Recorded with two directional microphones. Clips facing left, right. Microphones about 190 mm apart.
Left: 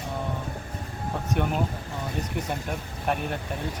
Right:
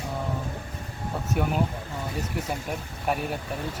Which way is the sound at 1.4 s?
5° right (ahead or behind).